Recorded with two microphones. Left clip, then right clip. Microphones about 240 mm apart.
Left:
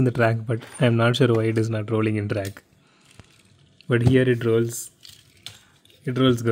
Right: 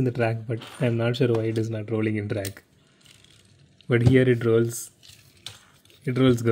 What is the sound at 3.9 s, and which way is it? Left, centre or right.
Speech, centre.